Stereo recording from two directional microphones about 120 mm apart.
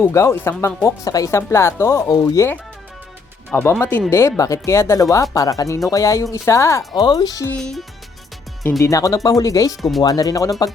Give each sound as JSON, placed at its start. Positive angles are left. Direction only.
{"t": 0.0, "sound": "speech", "side_deg": 25}
{"t": 7.0, "sound": "speech", "side_deg": 35}
{"t": 7.6, "sound": "music", "side_deg": 0}
{"t": 8.8, "sound": "speech", "side_deg": 30}